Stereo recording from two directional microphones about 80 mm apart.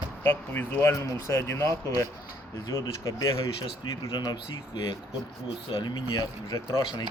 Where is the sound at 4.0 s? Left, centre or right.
Left.